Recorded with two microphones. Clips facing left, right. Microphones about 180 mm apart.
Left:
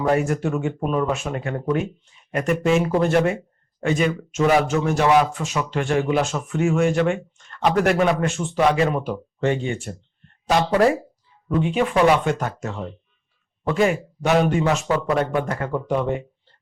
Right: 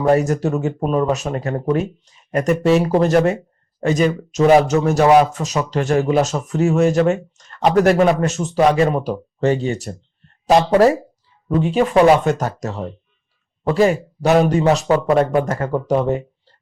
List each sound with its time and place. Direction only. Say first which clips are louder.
0.0 s speech: right 4 dB; 40° right (ahead or behind)